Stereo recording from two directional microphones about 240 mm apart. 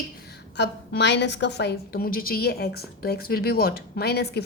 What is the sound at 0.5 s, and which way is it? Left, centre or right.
A woman's voice, left.